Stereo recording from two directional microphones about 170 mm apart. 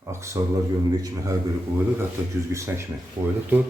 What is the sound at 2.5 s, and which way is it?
Speech, 15° right (ahead or behind).